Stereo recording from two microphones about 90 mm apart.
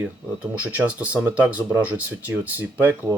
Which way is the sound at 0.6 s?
20° right (ahead or behind).